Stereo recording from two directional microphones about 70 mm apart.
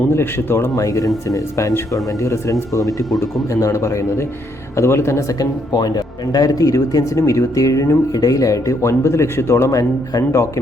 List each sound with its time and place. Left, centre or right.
0.1 s speech: left
0.8 s speech: left
5.4 s speech: left
9.7 s speech: left